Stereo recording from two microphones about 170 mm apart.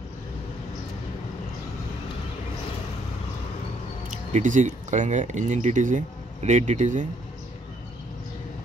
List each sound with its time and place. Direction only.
4.3 s speech: 45° right (ahead or behind)